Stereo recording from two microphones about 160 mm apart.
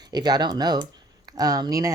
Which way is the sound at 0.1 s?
25° right (ahead or behind).